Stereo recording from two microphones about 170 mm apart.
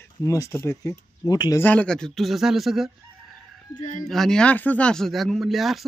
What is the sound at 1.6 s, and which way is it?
Speech, 10° left (ahead or behind).